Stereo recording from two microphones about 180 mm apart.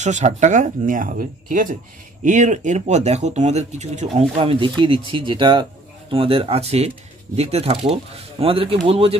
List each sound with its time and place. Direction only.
0.0 s speech: 40° right (ahead or behind)